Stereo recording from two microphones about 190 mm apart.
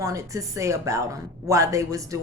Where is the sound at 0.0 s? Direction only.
15° right (ahead or behind).